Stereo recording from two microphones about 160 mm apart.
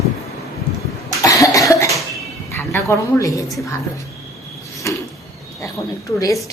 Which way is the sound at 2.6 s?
15° left (ahead or behind).